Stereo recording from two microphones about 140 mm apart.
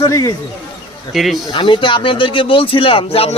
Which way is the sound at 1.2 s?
Centre (ahead or behind).